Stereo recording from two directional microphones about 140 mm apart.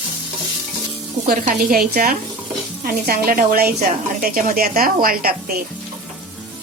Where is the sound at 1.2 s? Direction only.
85° right.